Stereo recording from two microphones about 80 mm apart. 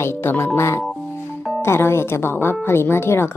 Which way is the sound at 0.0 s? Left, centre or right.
Left.